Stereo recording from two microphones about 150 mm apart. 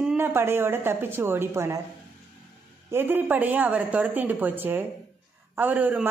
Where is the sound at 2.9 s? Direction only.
15° right (ahead or behind).